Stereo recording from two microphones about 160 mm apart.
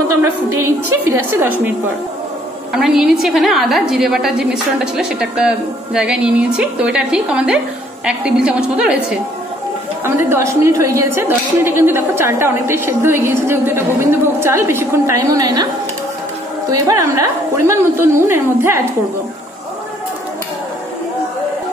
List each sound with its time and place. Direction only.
0.2 s a woman's voice: 15° right (ahead or behind)
2.7 s a woman's voice: 5° right (ahead or behind); by 15.7 s 25° right (ahead or behind)
16.8 s a woman's voice: 20° right (ahead or behind)